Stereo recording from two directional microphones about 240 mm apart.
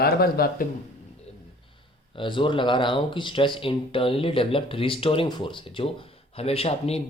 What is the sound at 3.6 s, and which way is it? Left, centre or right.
Speech, left.